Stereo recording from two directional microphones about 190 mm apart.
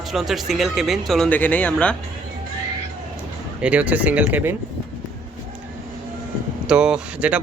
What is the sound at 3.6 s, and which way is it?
Speech, 5° right (ahead or behind).